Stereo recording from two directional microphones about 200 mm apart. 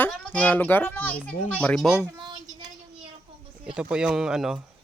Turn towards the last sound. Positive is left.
turn(degrees=-5)  # may be behind; listen again after turning